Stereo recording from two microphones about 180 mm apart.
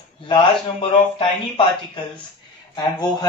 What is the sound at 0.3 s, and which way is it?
A man's voice, 30° left (ahead or behind).